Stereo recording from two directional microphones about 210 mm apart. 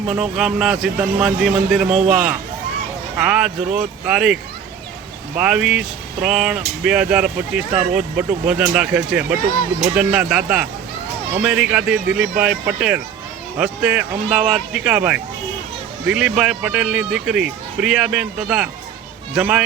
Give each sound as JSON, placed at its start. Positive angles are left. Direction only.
{"t": 0.1, "sound": "speech", "side_deg": -5}
{"t": 5.4, "sound": "speech", "side_deg": -5}